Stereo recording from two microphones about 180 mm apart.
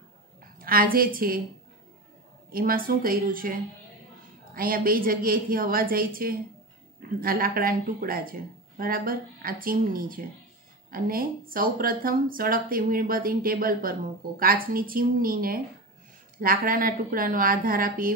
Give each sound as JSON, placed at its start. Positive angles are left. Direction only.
{"t": 0.6, "sound": "speech", "side_deg": -55}
{"t": 2.5, "sound": "speech", "side_deg": -55}